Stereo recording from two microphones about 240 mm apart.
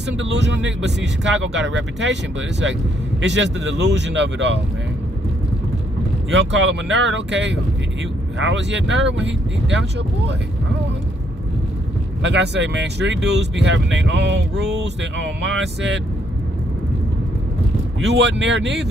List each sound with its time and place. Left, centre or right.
0.2 s speech: right
3.2 s speech: right
6.3 s speech: right
12.2 s speech: right
18.0 s speech: right